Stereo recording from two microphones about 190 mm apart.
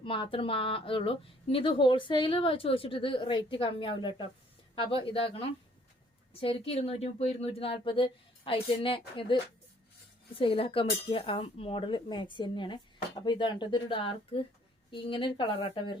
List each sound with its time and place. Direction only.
0.0 s speech: 25° left (ahead or behind)